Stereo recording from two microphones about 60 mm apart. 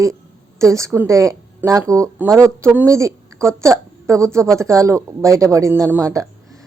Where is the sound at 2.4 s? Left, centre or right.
Right.